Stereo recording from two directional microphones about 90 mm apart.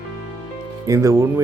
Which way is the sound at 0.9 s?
35° right (ahead or behind).